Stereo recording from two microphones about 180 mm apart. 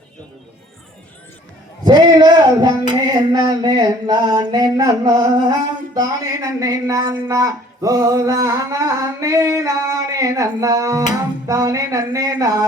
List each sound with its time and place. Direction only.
1.8 s speech: 25° right (ahead or behind)